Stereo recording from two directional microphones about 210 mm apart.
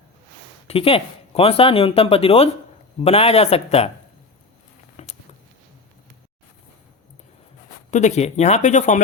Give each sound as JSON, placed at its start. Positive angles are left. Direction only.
{"t": 0.7, "sound": "speech", "side_deg": 25}
{"t": 5.0, "sound": "a sound", "side_deg": 35}
{"t": 7.9, "sound": "speech", "side_deg": 35}